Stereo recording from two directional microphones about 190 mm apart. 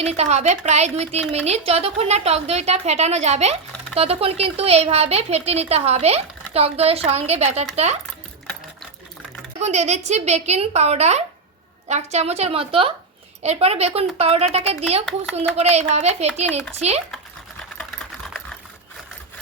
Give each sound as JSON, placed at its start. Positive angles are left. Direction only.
{"t": 0.1, "sound": "speech", "side_deg": -35}
{"t": 9.6, "sound": "speech", "side_deg": -35}
{"t": 16.5, "sound": "a child's voice", "side_deg": 10}
{"t": 16.7, "sound": "speech", "side_deg": -35}